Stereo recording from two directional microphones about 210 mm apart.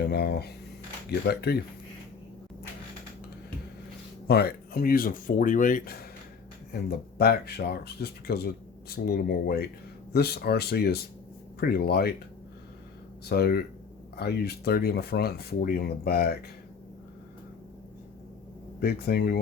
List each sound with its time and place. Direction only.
0.0 s speech: 50° left (ahead or behind)
4.3 s speech: 45° left (ahead or behind)
7.2 s speech: 50° left (ahead or behind)
13.2 s speech: 50° left (ahead or behind)
18.8 s speech: 45° left (ahead or behind)